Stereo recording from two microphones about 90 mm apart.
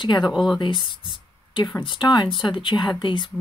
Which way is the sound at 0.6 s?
60° left (ahead or behind).